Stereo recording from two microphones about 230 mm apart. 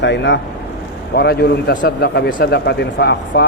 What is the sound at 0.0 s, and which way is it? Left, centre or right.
A man's voice, left.